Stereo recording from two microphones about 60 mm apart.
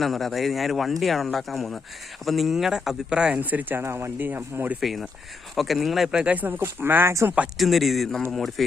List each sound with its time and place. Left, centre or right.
0.0 s speech: centre
3.6 s speech: right
3.8 s speech: right
4.2 s speech: right
4.8 s speech: centre
6.1 s speech: right
7.6 s speech: centre